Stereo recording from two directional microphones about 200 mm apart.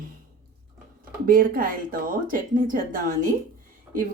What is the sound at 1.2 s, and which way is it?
Speech, 45° right (ahead or behind).